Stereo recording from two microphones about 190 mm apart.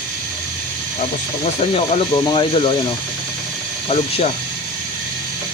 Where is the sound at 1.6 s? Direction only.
35° left (ahead or behind).